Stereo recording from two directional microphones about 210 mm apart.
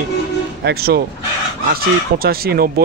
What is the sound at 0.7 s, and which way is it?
Speech, 50° right (ahead or behind).